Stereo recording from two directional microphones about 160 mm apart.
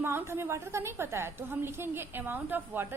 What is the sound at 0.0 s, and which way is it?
A woman's voice, 15° right (ahead or behind).